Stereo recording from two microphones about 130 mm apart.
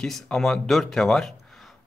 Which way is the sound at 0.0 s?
5° left (ahead or behind).